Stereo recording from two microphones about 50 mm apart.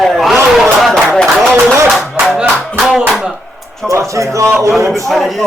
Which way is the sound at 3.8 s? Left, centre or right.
Right.